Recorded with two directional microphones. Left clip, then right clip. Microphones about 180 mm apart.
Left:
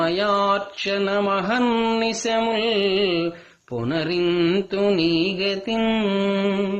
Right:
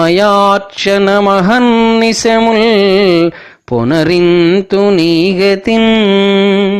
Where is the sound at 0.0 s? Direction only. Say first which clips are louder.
Right 12 dB; 45° right (ahead or behind).